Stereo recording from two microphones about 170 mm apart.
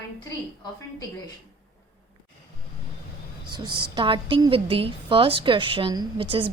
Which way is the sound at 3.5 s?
25° right (ahead or behind).